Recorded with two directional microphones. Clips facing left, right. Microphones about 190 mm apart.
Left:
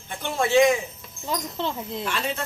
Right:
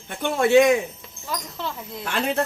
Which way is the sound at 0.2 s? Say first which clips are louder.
Right 4 dB; 60° right (ahead or behind).